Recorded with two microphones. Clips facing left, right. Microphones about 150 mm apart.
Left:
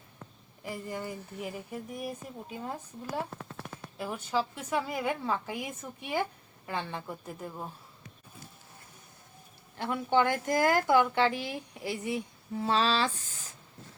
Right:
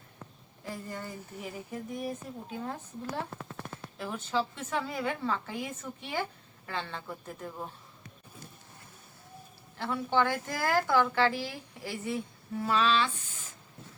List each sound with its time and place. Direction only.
0.6 s a woman's voice: 15° left (ahead or behind)
3.9 s a woman's voice: 10° left (ahead or behind)
9.7 s a woman's voice: 15° left (ahead or behind)
12.6 s speech: 30° left (ahead or behind)